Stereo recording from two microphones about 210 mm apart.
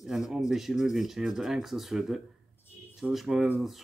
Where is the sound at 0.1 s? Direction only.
Centre (ahead or behind).